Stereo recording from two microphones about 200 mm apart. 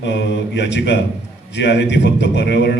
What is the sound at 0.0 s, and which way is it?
Speech, 60° left (ahead or behind).